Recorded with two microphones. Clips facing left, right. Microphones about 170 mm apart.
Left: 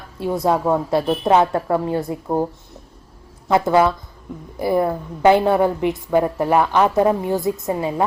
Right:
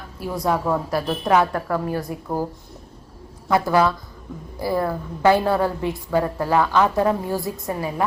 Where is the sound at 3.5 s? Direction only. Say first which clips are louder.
Left 3 dB; 20° left (ahead or behind).